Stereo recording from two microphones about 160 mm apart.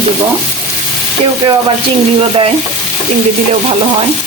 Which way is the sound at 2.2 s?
35° right (ahead or behind).